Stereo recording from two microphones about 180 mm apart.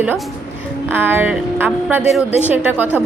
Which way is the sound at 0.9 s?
10° right (ahead or behind).